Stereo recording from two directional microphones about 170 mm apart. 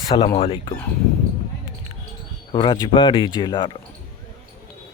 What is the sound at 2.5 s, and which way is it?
Speech, 25° left (ahead or behind).